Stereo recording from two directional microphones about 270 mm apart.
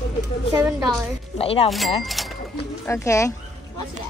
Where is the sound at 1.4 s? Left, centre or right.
Left.